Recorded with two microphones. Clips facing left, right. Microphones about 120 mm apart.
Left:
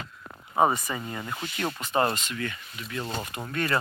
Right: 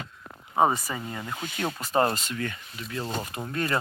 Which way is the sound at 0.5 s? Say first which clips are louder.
Even; 10° left (ahead or behind).